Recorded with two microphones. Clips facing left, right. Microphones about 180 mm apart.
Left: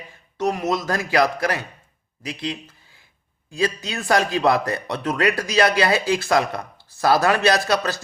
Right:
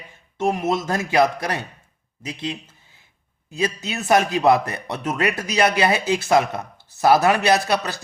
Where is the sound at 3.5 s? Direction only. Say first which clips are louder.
Left 1 dB; 20° right (ahead or behind).